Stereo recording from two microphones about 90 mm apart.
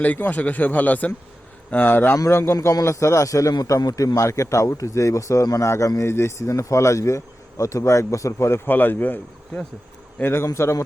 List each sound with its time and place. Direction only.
0.0 s a man's voice: 20° left (ahead or behind)
2.1 s a man's voice: 35° left (ahead or behind)